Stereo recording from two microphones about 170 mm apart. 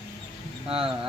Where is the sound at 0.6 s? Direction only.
35° right (ahead or behind).